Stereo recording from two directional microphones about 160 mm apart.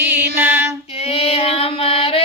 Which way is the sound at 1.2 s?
40° left (ahead or behind).